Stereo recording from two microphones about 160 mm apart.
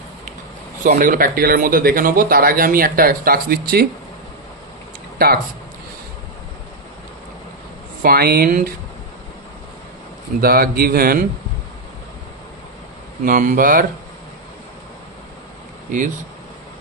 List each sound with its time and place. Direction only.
0.8 s speech: 65° right (ahead or behind)
5.2 s a man's voice: 75° right (ahead or behind)
8.0 s a man's voice: 70° right (ahead or behind)
10.4 s a man's voice: 65° right (ahead or behind)
13.2 s speech: 55° right (ahead or behind)